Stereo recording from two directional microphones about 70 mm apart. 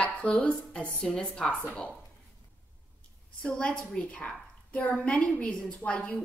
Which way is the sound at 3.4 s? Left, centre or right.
Centre.